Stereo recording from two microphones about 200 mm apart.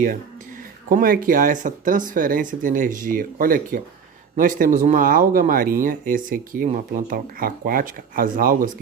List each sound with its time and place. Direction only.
0.9 s speech: 45° right (ahead or behind)